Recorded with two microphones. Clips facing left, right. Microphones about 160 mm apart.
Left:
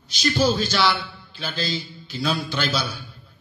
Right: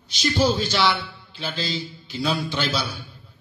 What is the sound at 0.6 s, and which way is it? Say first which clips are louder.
Speech: even; 25° right (ahead or behind).